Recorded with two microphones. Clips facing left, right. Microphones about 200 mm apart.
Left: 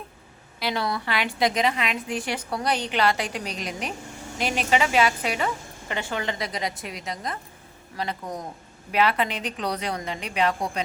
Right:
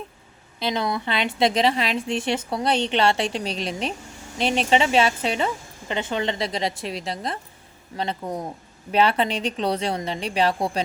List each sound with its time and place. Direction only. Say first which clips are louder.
0.6 s a woman's voice: right 2 dB; 20° right (ahead or behind)